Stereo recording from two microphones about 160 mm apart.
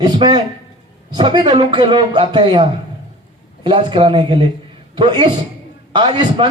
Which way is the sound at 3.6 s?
30° right (ahead or behind).